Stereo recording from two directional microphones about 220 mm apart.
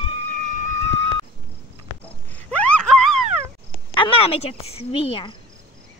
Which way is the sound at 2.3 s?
5° left (ahead or behind).